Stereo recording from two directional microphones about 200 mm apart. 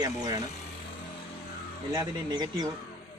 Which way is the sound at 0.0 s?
20° right (ahead or behind).